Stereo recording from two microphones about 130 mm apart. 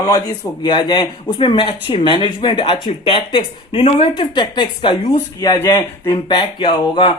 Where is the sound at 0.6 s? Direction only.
35° left (ahead or behind).